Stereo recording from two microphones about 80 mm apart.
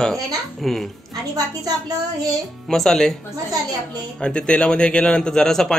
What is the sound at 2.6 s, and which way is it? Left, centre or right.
Speech, centre.